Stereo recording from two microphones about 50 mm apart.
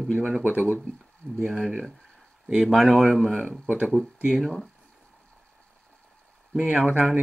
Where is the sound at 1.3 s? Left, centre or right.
Centre.